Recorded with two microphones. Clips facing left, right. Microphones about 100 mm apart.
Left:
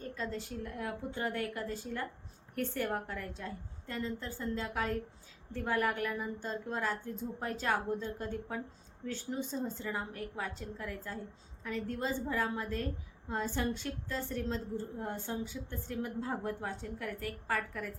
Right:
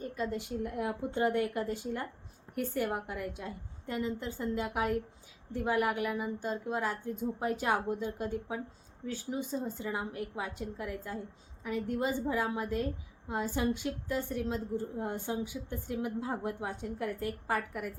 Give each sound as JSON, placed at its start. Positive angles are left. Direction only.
{"t": 0.0, "sound": "a woman's voice", "side_deg": -15}